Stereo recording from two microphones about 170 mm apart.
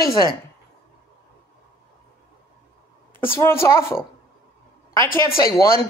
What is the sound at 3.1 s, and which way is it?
Speech, 15° left (ahead or behind).